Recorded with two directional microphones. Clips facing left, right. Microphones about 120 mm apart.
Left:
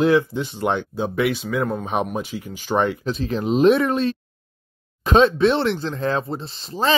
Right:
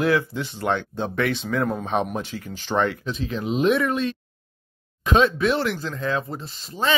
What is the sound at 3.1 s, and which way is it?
Speech, 40° left (ahead or behind).